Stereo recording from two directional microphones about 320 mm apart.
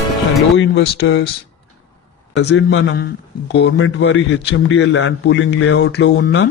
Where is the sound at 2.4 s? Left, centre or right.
Left.